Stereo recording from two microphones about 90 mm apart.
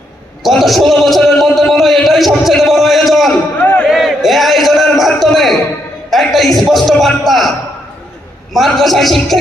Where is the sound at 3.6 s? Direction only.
15° left (ahead or behind).